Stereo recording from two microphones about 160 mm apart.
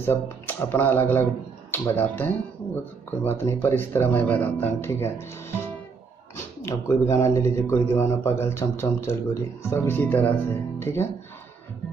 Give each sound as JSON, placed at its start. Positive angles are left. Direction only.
{"t": 0.0, "sound": "a man's voice", "side_deg": 15}
{"t": 6.3, "sound": "a man's voice", "side_deg": 20}